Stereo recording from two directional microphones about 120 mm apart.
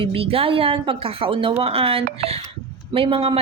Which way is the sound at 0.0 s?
50° right (ahead or behind).